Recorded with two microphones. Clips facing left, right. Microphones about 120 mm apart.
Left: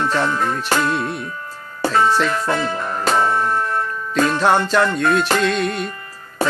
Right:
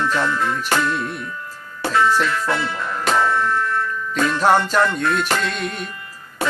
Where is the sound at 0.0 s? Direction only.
40° left (ahead or behind).